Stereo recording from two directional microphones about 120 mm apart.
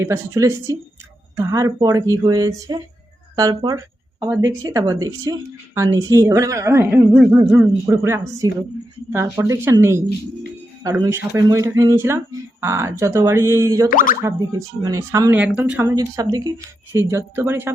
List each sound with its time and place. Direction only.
0.0 s speech: 25° right (ahead or behind); by 3.8 s 40° right (ahead or behind)
4.6 s speech: 30° right (ahead or behind)
7.1 s speech: 10° right (ahead or behind)
7.9 s speech: 25° right (ahead or behind)
15.4 s speech: 15° right (ahead or behind)
15.8 s speech: 25° right (ahead or behind)